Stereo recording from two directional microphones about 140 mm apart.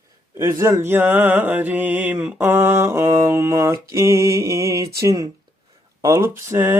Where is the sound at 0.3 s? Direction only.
15° right (ahead or behind).